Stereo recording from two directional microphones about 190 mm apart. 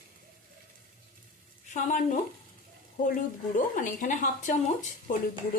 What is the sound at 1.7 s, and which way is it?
Speech, 40° left (ahead or behind).